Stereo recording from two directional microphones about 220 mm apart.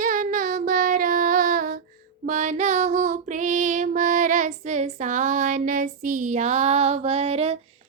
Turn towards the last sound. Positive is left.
turn(degrees=-30)  # may be behind; listen again after turning